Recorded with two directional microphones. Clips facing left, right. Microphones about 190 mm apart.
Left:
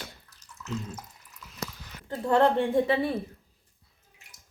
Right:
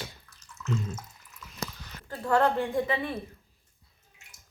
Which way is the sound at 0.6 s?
5° left (ahead or behind).